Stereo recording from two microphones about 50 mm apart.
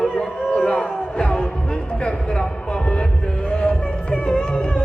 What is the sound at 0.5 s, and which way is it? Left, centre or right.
Music, centre.